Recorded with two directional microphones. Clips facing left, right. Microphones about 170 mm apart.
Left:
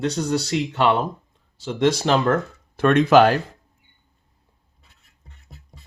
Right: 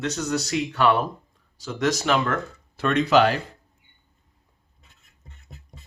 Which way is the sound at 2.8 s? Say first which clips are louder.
Left 5 dB; 50° left (ahead or behind).